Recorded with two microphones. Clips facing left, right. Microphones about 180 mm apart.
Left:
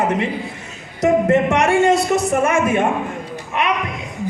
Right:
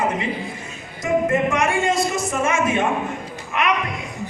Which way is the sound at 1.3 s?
75° left (ahead or behind).